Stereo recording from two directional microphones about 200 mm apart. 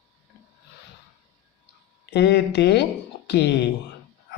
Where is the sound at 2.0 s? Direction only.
55° left (ahead or behind).